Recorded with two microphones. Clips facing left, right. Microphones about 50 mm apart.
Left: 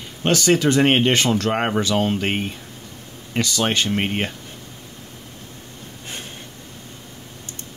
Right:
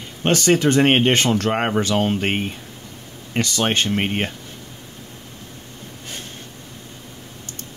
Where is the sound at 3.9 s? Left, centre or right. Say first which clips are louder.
Right 1 dB; centre.